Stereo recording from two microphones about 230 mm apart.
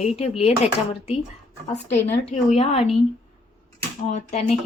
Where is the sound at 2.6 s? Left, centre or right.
Left.